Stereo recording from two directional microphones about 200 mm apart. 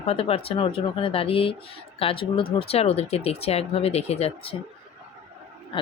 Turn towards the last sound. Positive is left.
turn(degrees=25)  # may be behind; listen again after turning